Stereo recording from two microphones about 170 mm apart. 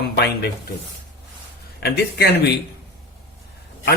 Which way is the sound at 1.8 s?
70° left (ahead or behind).